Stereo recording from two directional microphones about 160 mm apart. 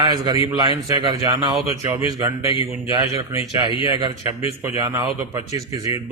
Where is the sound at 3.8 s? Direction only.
20° right (ahead or behind).